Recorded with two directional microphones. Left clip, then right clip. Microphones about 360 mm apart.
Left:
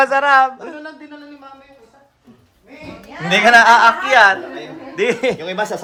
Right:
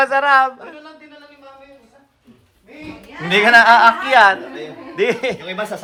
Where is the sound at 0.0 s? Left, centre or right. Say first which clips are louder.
Left 1 dB; centre.